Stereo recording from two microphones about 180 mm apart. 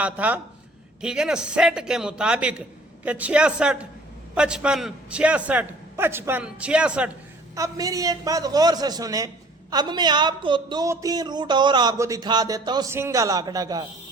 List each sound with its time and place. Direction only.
0.0 s a man's voice: 10° right (ahead or behind)
7.5 s a man's voice: 20° right (ahead or behind)